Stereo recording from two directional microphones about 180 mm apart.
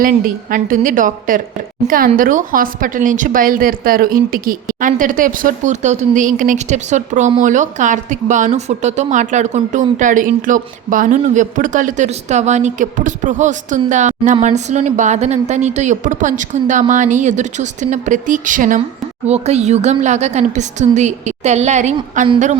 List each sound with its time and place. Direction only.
0.5 s a woman's voice: 50° right (ahead or behind)
19.3 s a woman's voice: 35° right (ahead or behind)